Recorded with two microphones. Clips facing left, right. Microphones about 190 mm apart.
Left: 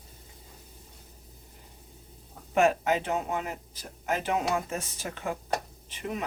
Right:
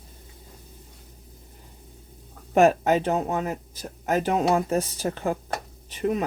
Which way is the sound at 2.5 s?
40° right (ahead or behind).